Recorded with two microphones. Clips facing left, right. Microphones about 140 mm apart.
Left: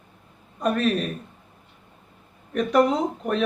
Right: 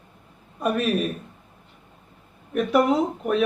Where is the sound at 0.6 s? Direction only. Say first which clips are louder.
Even; 5° right (ahead or behind).